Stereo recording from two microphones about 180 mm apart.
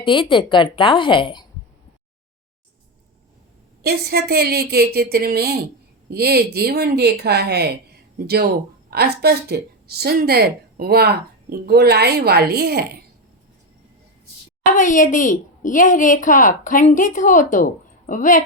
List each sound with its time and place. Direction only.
0.0 s a woman's voice: 25° left (ahead or behind)
3.8 s a woman's voice: 60° right (ahead or behind)
8.9 s a woman's voice: 60° right (ahead or behind)
14.8 s a woman's voice: 45° left (ahead or behind)